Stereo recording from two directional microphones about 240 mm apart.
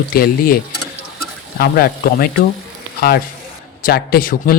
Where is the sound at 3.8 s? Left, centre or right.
Left.